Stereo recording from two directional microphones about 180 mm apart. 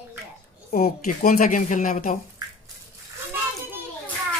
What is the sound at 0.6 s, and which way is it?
Speech, 55° left (ahead or behind).